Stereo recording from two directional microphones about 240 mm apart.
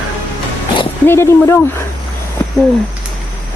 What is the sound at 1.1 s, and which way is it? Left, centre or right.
Speech, centre.